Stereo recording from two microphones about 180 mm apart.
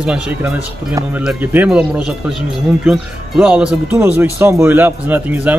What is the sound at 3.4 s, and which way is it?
A man's voice, 5° right (ahead or behind).